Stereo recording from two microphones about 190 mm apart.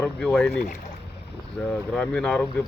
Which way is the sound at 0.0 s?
5° left (ahead or behind).